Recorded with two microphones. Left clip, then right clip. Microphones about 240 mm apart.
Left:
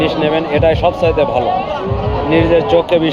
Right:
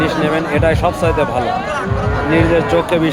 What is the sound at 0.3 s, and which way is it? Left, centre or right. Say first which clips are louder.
Speech: left 2 dB; centre.